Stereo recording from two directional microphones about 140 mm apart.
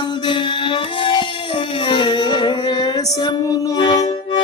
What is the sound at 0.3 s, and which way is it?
Music, 35° left (ahead or behind).